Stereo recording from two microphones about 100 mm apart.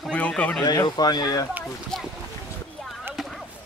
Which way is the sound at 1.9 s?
5° left (ahead or behind).